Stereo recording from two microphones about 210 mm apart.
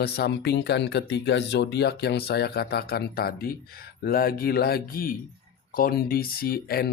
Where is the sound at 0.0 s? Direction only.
50° left (ahead or behind).